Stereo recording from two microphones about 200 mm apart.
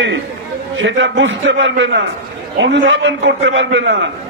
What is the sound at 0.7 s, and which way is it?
A man's voice, 65° right (ahead or behind).